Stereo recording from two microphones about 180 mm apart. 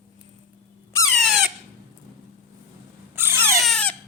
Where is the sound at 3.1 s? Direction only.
10° right (ahead or behind).